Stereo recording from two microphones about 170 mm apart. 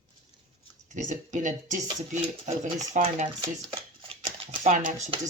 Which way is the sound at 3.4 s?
30° right (ahead or behind).